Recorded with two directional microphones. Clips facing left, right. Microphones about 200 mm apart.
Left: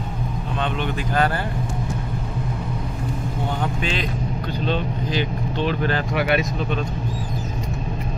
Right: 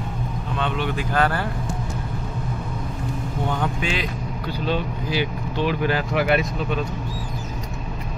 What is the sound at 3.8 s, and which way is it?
Speech, 10° right (ahead or behind).